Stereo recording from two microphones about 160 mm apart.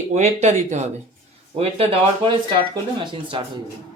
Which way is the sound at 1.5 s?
35° right (ahead or behind).